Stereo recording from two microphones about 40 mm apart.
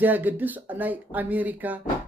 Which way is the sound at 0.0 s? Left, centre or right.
Right.